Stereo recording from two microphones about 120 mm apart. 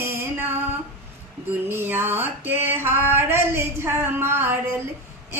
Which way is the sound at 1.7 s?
20° right (ahead or behind).